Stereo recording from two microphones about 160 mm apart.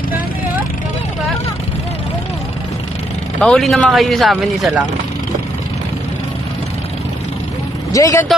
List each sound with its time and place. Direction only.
3.3 s speech: 5° left (ahead or behind)
7.9 s speech: 20° left (ahead or behind)